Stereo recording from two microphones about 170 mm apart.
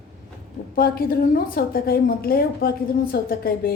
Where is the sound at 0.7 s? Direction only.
60° left (ahead or behind).